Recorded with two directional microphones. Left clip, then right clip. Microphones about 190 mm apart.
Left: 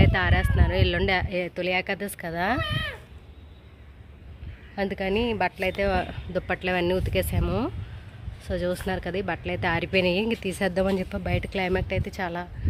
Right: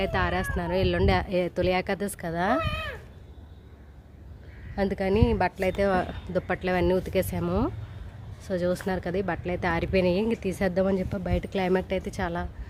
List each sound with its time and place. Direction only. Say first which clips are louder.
0.0 s speech: left 2 dB; 5° right (ahead or behind)
2.6 s speech: left 1 dB; 60° right (ahead or behind)
4.7 s a woman's voice: right 1 dB; 10° right (ahead or behind)